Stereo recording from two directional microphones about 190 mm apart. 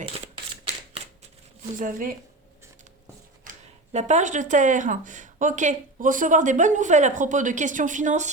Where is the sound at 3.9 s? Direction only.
40° right (ahead or behind).